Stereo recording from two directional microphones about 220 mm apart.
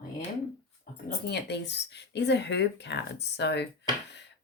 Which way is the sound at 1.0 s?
50° left (ahead or behind).